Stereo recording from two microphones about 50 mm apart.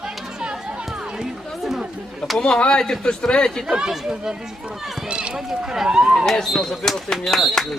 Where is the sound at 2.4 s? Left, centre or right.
Centre.